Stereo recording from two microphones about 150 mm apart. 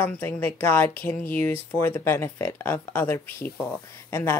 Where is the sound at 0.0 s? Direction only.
15° left (ahead or behind).